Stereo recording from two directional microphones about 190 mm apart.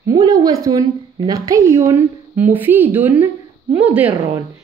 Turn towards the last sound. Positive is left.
turn(degrees=-10)  # may be behind; listen again after turning